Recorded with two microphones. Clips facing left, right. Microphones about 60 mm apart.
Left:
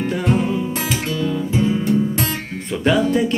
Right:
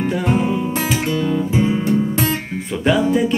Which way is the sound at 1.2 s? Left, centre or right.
Centre.